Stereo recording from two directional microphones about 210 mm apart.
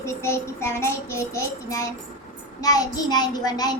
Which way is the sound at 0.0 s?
10° left (ahead or behind).